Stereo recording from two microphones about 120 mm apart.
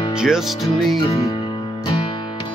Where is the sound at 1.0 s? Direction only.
30° left (ahead or behind).